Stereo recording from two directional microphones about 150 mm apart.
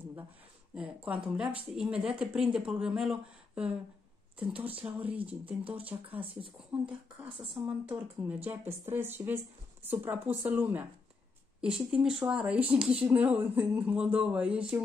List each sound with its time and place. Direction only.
0.7 s speech: 10° right (ahead or behind)
4.6 s speech: 40° right (ahead or behind)
5.1 s speech: 10° right (ahead or behind)
7.6 s speech: 10° right (ahead or behind)